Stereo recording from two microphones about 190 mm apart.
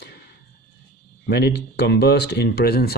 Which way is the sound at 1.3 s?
60° left (ahead or behind).